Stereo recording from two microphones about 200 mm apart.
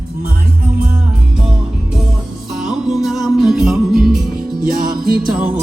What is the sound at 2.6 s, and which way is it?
Music, 5° right (ahead or behind).